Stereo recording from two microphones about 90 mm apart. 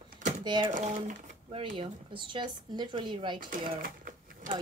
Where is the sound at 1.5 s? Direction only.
70° right (ahead or behind).